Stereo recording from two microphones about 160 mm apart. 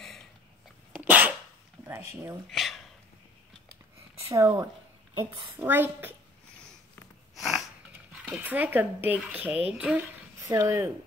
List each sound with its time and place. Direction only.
0.9 s dog: 10° right (ahead or behind)
1.9 s speech: 15° right (ahead or behind)
2.5 s a sound: centre (ahead or behind)
4.3 s speech: 20° right (ahead or behind)
7.3 s sniff: centre (ahead or behind)
8.3 s speech: 10° right (ahead or behind)
10.5 s speech: 20° right (ahead or behind)